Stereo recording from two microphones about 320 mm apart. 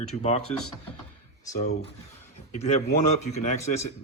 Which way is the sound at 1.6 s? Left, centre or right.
Left.